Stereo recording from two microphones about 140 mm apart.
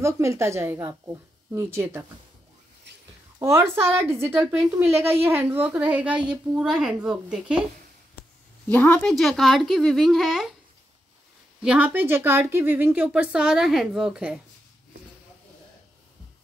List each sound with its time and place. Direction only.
0.0 s speech: 20° right (ahead or behind)
3.3 s a woman's voice: 20° right (ahead or behind)
8.6 s speech: 10° left (ahead or behind)
9.1 s speech: centre (ahead or behind)
11.6 s a woman's voice: 10° right (ahead or behind)